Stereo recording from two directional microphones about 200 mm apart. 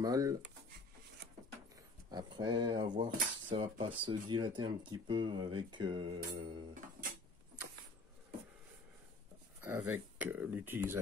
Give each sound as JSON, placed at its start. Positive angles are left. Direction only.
{"t": 0.0, "sound": "speech", "side_deg": -15}
{"t": 2.0, "sound": "speech", "side_deg": -20}
{"t": 9.6, "sound": "speech", "side_deg": -10}